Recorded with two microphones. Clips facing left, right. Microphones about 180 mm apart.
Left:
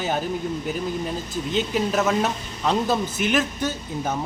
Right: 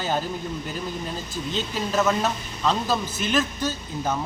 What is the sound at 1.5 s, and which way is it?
Speech, 15° left (ahead or behind).